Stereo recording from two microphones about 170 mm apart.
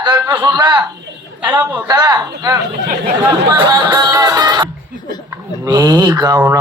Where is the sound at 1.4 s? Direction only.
10° right (ahead or behind).